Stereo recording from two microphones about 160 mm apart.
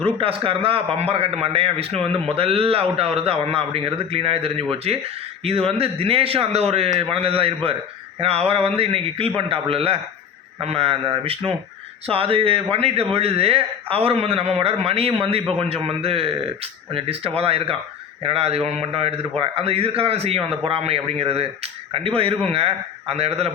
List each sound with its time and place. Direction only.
0.2 s a man's voice: 35° right (ahead or behind)